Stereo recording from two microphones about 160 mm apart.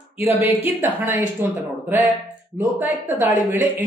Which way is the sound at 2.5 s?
10° right (ahead or behind).